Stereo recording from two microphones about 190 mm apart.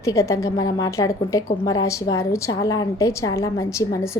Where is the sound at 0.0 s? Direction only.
15° left (ahead or behind).